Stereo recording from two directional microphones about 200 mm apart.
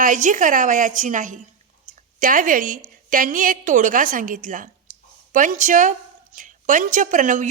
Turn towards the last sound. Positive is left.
turn(degrees=-40)  # may be behind; listen again after turning